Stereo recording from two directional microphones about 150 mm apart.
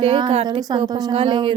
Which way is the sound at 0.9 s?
25° right (ahead or behind).